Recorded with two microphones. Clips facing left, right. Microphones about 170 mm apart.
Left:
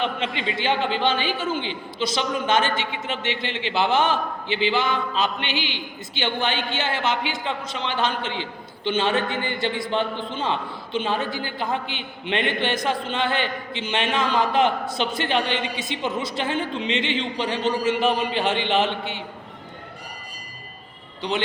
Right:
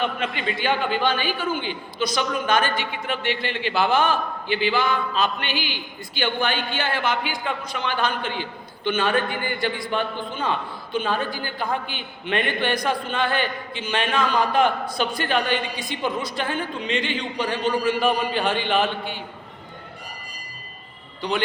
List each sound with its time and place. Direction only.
0.0 s a man's voice: 20° left (ahead or behind)
21.2 s speech: 20° left (ahead or behind)